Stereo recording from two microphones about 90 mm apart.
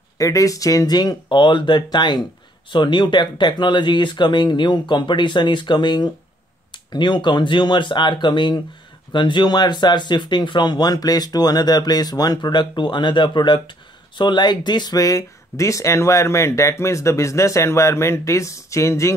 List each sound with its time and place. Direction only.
0.2 s speech: 40° left (ahead or behind)